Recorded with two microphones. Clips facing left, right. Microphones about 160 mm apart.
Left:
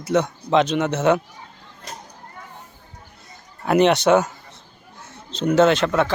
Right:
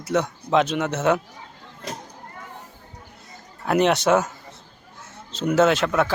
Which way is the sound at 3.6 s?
Centre (ahead or behind).